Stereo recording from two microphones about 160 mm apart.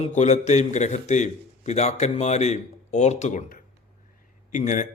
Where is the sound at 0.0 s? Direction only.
45° left (ahead or behind).